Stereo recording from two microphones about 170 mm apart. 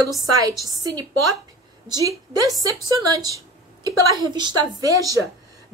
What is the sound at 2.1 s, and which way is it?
A woman's voice, 20° right (ahead or behind).